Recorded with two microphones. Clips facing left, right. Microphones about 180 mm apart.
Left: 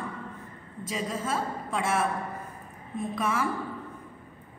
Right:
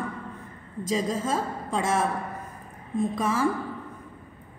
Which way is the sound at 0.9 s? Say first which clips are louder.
Right 4 dB; 30° right (ahead or behind).